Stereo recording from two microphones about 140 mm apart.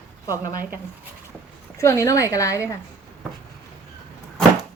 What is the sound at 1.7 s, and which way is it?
A woman's voice, 20° left (ahead or behind).